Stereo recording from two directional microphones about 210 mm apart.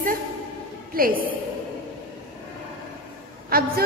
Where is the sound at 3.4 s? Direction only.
45° right (ahead or behind).